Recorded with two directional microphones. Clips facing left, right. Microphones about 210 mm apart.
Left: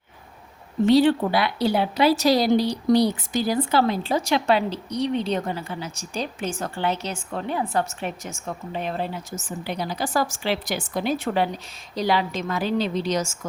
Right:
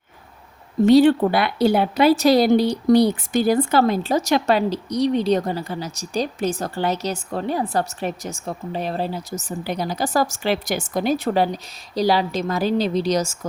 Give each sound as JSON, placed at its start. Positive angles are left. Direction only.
{"t": 0.9, "sound": "a woman's voice", "side_deg": -50}